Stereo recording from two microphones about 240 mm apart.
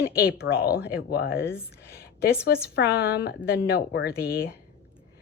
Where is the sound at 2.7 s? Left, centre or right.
Left.